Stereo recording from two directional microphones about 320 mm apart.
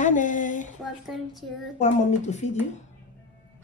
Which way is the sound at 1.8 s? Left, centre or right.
Left.